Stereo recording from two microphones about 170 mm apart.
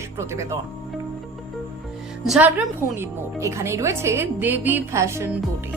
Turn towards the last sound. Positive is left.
turn(degrees=-15)  # may be behind; listen again after turning